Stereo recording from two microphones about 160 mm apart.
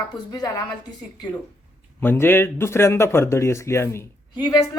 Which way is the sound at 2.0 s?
15° left (ahead or behind).